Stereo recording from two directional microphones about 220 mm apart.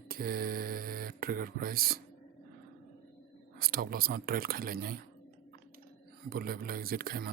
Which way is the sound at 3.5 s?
40° right (ahead or behind).